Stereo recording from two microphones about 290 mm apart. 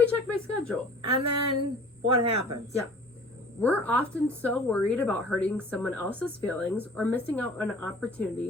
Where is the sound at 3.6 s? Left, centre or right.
Centre.